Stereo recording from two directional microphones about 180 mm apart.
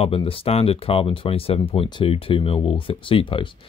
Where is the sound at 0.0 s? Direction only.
30° left (ahead or behind).